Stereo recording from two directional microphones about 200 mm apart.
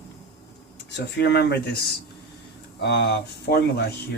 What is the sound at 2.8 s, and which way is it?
Speech, 55° left (ahead or behind).